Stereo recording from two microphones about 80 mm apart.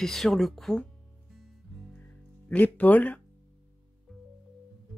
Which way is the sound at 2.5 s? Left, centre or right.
Centre.